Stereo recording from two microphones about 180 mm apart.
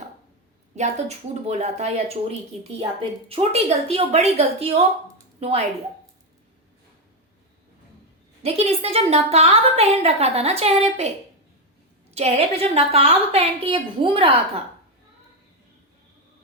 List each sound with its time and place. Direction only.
0.8 s a woman's voice: 35° right (ahead or behind)
8.4 s a woman's voice: 35° right (ahead or behind)
12.1 s a woman's voice: 35° right (ahead or behind)